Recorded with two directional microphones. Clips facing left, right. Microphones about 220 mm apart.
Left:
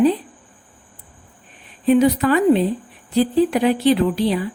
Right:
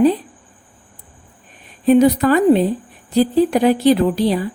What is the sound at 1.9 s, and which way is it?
Speech, 40° right (ahead or behind).